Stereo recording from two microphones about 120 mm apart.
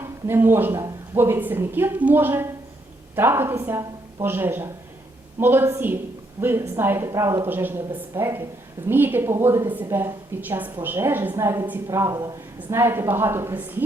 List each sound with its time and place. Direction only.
0.0 s a woman's voice: 20° right (ahead or behind)